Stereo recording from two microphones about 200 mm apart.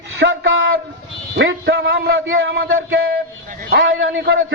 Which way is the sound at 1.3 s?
60° right (ahead or behind).